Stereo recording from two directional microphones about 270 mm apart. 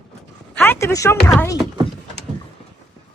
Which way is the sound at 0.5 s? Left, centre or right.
Centre.